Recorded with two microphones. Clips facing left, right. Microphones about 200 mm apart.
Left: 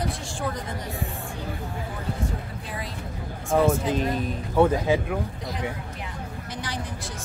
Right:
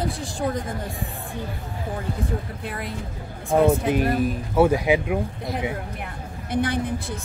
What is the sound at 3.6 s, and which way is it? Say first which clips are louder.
Speech: right 3 dB; 60° right (ahead or behind).